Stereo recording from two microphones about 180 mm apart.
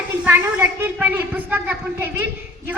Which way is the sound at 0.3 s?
5° right (ahead or behind).